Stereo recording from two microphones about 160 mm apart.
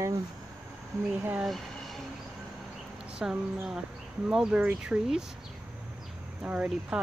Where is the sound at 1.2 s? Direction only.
10° right (ahead or behind).